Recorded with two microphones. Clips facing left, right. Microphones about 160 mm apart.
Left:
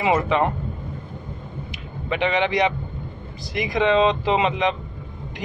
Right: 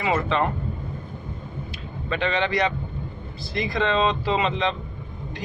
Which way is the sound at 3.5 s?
15° left (ahead or behind).